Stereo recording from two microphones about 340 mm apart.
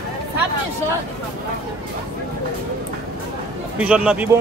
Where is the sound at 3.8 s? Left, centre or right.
Centre.